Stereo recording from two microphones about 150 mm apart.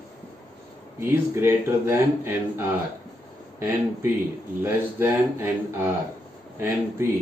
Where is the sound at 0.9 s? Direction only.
15° right (ahead or behind).